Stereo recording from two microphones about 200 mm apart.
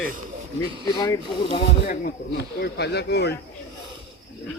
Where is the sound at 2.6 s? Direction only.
55° left (ahead or behind).